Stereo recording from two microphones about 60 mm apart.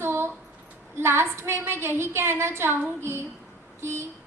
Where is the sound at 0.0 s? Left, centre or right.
Right.